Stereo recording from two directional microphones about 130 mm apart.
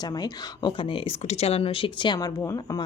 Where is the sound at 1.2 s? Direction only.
50° left (ahead or behind); by 2.3 s 35° left (ahead or behind).